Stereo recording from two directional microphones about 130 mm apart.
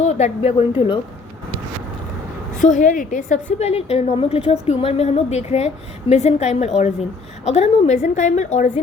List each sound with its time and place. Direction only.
0.0 s speech: 55° left (ahead or behind)
2.6 s a woman's voice: 75° left (ahead or behind)